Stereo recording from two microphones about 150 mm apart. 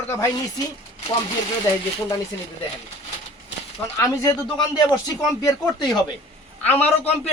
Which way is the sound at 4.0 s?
25° left (ahead or behind).